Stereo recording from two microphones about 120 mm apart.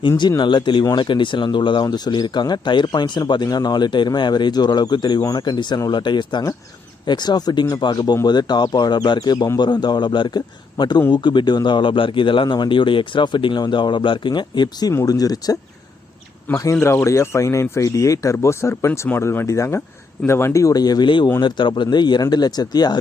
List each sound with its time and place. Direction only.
0.2 s speech: 40° left (ahead or behind)
16.5 s speech: 15° left (ahead or behind); by 23.0 s 35° left (ahead or behind)